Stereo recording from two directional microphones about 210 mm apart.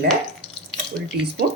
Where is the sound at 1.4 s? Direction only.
50° right (ahead or behind).